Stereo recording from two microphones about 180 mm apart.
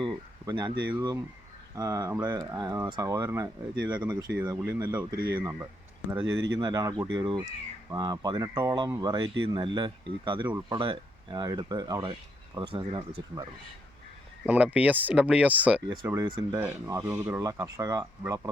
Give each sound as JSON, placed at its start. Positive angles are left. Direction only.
{"t": 0.0, "sound": "a sound", "side_deg": -25}
{"t": 0.9, "sound": "speech", "side_deg": -20}
{"t": 6.6, "sound": "speech", "side_deg": -20}
{"t": 14.4, "sound": "speech", "side_deg": -10}
{"t": 16.1, "sound": "speech", "side_deg": -20}